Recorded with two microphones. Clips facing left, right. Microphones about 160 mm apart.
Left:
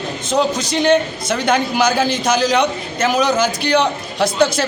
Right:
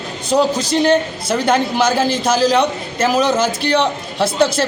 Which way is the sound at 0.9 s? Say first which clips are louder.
Even; 30° right (ahead or behind).